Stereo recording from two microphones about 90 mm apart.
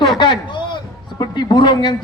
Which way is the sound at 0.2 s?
60° left (ahead or behind).